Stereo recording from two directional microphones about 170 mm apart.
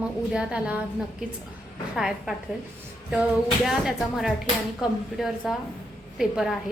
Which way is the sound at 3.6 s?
Centre (ahead or behind).